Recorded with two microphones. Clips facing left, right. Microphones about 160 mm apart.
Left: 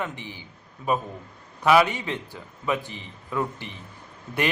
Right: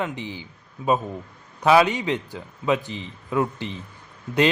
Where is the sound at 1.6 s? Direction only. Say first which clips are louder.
Right 2 dB; 20° right (ahead or behind).